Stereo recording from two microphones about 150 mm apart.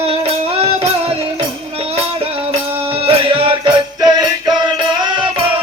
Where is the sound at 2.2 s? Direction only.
40° right (ahead or behind).